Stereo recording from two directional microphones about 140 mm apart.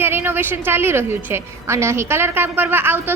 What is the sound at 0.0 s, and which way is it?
A woman's voice, 15° right (ahead or behind).